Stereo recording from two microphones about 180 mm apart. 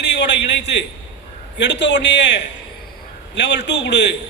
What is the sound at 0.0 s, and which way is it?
A man's voice, 75° left (ahead or behind).